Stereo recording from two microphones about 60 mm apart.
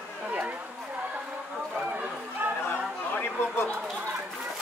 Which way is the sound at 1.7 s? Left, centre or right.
Right.